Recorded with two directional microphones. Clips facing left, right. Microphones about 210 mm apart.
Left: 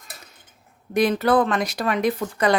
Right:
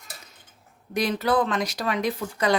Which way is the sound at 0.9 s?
55° left (ahead or behind).